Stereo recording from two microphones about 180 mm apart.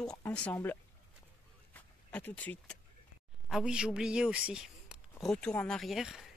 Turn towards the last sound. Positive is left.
turn(degrees=0)  # may be behind; listen again after turning